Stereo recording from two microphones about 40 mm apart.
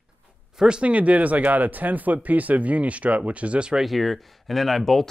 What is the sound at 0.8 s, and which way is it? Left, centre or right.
Speech, right.